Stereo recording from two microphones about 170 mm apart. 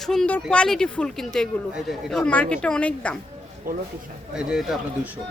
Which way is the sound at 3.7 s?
55° right (ahead or behind).